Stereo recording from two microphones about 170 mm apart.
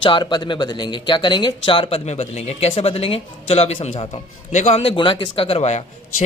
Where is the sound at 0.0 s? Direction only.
25° left (ahead or behind).